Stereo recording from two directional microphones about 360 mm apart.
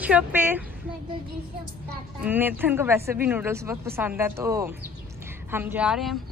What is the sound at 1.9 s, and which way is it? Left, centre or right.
A woman's voice, centre.